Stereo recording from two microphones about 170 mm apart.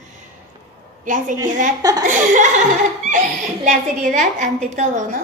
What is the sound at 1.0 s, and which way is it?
A woman's voice, 50° right (ahead or behind).